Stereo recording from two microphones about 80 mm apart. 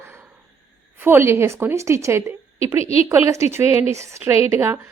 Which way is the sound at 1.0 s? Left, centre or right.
Right.